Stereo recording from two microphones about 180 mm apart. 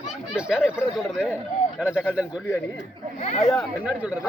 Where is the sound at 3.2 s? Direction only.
35° left (ahead or behind).